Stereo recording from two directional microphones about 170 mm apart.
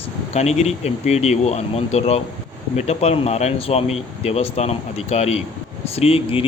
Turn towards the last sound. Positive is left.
turn(degrees=35)  # may be behind; listen again after turning